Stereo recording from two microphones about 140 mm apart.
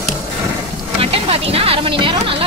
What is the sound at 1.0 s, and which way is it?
Vehicle, 45° right (ahead or behind).